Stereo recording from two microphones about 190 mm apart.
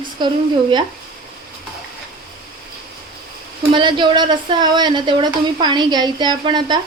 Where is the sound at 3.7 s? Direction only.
25° right (ahead or behind).